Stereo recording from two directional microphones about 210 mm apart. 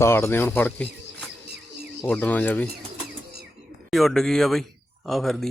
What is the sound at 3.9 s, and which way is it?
A man's voice, centre (ahead or behind).